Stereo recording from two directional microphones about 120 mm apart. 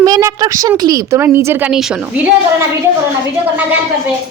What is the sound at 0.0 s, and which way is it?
A woman's voice, 30° right (ahead or behind).